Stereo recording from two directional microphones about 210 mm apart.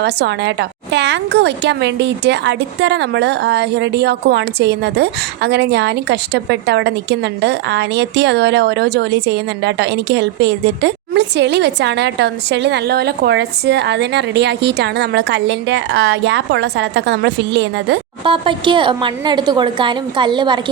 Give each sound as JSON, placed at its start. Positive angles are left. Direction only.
{"t": 0.0, "sound": "a woman's voice", "side_deg": -55}
{"t": 18.3, "sound": "a woman's voice", "side_deg": -25}